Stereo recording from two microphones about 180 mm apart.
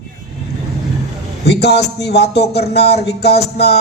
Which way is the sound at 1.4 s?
65° left (ahead or behind).